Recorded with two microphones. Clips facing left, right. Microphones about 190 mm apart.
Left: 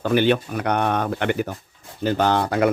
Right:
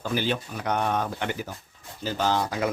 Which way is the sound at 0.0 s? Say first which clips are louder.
Left 9 dB; 65° left (ahead or behind).